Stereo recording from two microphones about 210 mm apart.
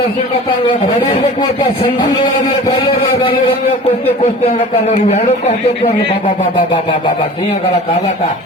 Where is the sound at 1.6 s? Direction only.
20° left (ahead or behind).